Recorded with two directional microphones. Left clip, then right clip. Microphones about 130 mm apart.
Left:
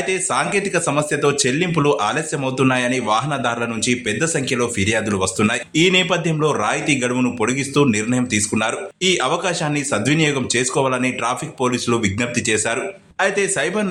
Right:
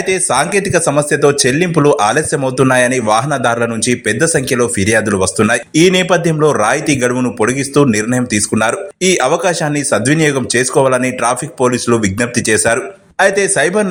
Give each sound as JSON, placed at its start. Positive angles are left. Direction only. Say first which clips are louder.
{"t": 0.1, "sound": "speech", "louder": "right 7 dB", "side_deg": -40}